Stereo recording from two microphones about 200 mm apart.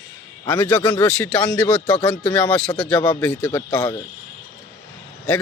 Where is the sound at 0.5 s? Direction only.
10° left (ahead or behind).